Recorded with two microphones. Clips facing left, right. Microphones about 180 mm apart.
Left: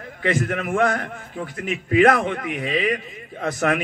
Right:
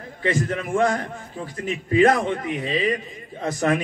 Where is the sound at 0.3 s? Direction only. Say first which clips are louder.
Left 1 dB; 60° left (ahead or behind).